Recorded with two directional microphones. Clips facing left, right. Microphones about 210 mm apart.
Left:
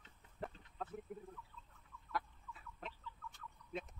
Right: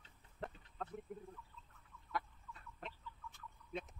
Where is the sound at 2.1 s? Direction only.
Centre (ahead or behind).